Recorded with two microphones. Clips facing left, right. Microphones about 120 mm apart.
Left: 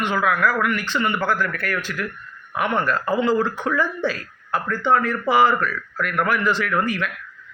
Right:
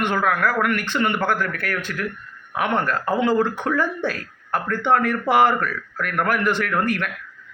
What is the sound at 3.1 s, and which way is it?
Speech, 55° right (ahead or behind).